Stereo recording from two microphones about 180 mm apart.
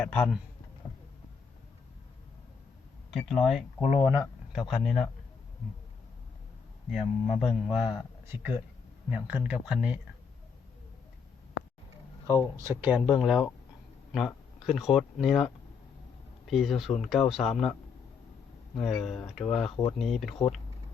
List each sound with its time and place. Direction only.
0.0 s a man's voice: 5° left (ahead or behind)
3.1 s a man's voice: centre (ahead or behind)
3.8 s speech: 30° left (ahead or behind)
4.1 s speech: centre (ahead or behind)
6.9 s a man's voice: 5° right (ahead or behind)
11.6 s a sound: 90° left
12.5 s a man's voice: 15° right (ahead or behind)
16.5 s a man's voice: centre (ahead or behind)
18.8 s a man's voice: centre (ahead or behind)